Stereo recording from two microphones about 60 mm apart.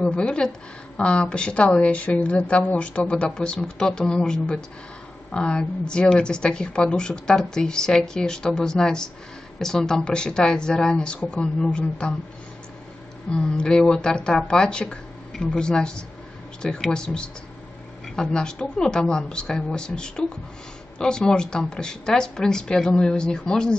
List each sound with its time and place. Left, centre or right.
0.0 s a woman's voice: centre
13.3 s a woman's voice: centre